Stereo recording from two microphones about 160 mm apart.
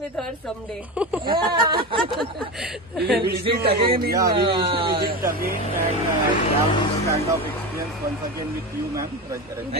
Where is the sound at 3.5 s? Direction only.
75° right (ahead or behind).